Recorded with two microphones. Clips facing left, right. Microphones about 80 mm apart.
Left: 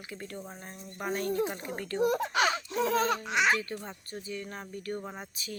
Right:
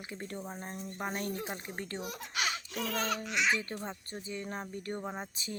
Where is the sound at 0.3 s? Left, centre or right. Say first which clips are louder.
Right 2 dB; centre.